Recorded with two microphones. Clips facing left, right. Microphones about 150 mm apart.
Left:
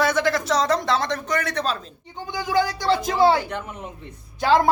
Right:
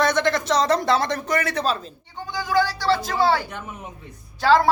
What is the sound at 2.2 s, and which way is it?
A woman's voice, 20° left (ahead or behind).